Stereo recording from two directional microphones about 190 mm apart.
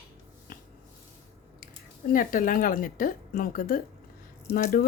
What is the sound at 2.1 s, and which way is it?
A woman's voice, 45° left (ahead or behind).